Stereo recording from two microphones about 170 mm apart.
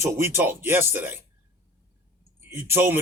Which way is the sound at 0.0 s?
15° right (ahead or behind).